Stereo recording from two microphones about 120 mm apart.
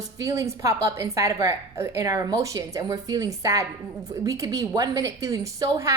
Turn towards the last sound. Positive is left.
turn(degrees=-25)  # may be behind; listen again after turning